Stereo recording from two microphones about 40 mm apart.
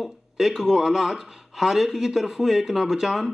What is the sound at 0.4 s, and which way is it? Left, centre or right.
Speech, centre.